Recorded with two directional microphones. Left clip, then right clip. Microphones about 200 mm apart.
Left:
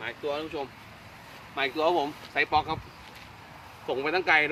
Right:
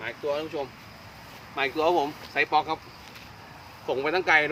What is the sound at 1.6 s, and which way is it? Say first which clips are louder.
Speech: right 2 dB; 5° left (ahead or behind).